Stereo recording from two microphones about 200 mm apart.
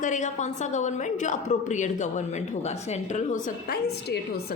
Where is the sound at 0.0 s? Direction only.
35° left (ahead or behind).